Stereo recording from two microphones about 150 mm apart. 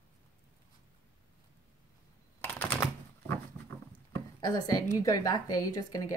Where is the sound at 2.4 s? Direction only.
15° left (ahead or behind).